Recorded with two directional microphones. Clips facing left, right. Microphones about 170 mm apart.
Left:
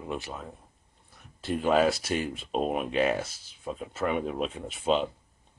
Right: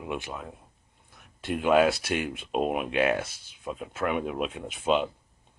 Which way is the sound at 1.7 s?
Centre (ahead or behind).